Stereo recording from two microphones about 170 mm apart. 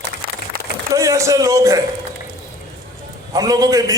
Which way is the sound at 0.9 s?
20° right (ahead or behind).